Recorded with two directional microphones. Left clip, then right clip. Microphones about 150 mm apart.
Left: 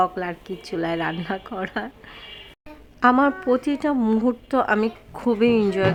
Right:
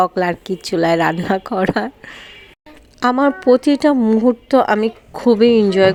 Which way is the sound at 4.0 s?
20° right (ahead or behind).